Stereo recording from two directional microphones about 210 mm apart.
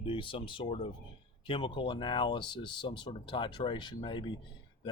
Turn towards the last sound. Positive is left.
turn(degrees=20)  # may be behind; listen again after turning